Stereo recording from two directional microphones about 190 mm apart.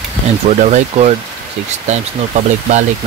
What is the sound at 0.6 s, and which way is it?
Speech, 40° right (ahead or behind).